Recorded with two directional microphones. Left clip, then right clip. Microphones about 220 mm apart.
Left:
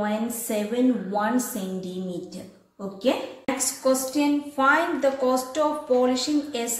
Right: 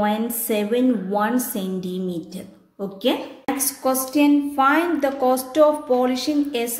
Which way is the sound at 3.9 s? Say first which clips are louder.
Right 4 dB; 40° right (ahead or behind).